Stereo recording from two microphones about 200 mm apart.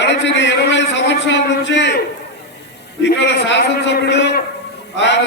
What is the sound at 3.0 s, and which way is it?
A man's voice, 60° left (ahead or behind).